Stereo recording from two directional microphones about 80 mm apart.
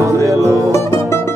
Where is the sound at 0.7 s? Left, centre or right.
Left.